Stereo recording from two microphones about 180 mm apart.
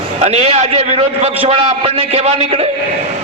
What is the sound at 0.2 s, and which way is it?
A man's voice, 35° right (ahead or behind).